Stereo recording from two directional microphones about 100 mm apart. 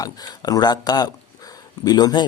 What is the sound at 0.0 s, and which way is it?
Speech, 40° left (ahead or behind).